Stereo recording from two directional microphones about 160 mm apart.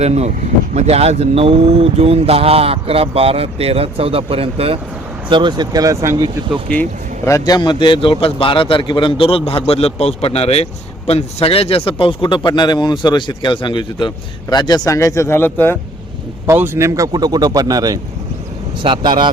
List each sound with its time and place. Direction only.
0.0 s speech: 45° right (ahead or behind); by 6.3 s 20° right (ahead or behind)
6.7 s speech: 5° left (ahead or behind)
7.3 s a man's voice: 20° left (ahead or behind)
16.5 s speech: 15° right (ahead or behind); by 19.3 s 30° right (ahead or behind)